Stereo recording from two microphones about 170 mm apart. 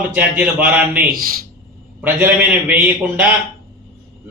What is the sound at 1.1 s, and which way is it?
Speech, 55° right (ahead or behind).